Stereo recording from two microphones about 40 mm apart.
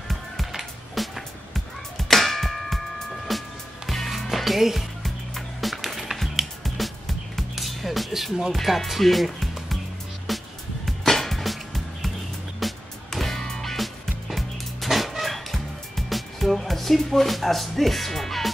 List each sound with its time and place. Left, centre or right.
0.6 s music: centre
4.4 s speech: centre
5.0 s music: centre
8.5 s speech: centre
10.9 s music: centre